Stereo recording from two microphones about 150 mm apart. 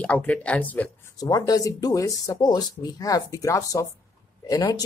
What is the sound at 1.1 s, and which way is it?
Speech, 25° left (ahead or behind).